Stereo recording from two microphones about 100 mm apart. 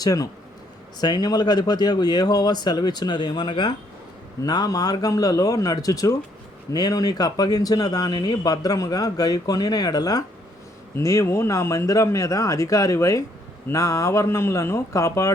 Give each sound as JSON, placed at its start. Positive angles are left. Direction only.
{"t": 0.0, "sound": "speech", "side_deg": 40}
{"t": 10.9, "sound": "speech", "side_deg": 30}